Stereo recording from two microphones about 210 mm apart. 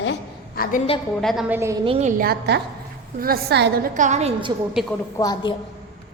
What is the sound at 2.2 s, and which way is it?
A woman's voice, 50° right (ahead or behind).